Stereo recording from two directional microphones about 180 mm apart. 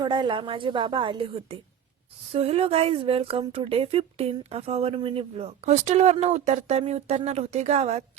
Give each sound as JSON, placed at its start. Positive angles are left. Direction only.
{"t": 0.0, "sound": "a woman's voice", "side_deg": -25}